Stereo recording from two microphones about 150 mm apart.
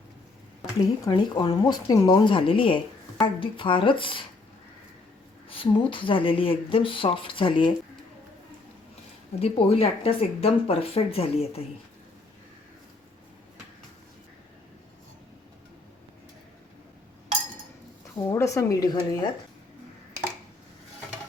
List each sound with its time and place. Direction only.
1.0 s a woman's voice: 30° left (ahead or behind)
5.5 s a woman's voice: 35° left (ahead or behind)
9.4 s a woman's voice: 40° left (ahead or behind)
18.3 s a woman's voice: 20° left (ahead or behind)